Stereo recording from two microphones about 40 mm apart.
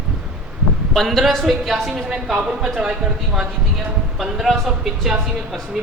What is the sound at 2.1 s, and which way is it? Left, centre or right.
Speech, centre.